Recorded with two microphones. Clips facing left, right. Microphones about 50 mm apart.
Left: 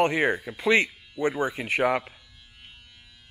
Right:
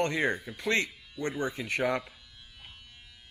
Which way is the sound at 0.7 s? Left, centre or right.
Left.